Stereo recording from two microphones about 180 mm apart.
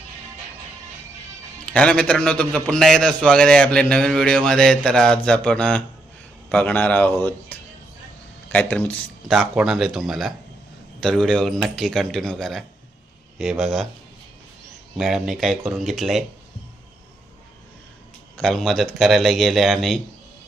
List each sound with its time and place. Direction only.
1.6 s a man's voice: 5° left (ahead or behind)
9.3 s a man's voice: centre (ahead or behind)
14.9 s a man's voice: centre (ahead or behind)
18.3 s a man's voice: centre (ahead or behind)